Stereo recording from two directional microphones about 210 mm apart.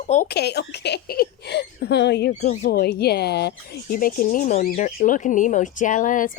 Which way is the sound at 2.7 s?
50° left (ahead or behind).